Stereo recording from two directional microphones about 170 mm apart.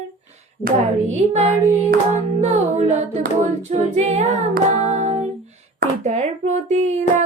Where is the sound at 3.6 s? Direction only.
40° right (ahead or behind).